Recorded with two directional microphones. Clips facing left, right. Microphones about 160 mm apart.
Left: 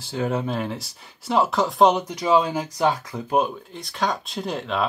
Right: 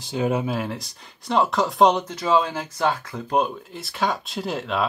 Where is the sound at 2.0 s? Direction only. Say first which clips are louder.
Left 1 dB; 15° left (ahead or behind).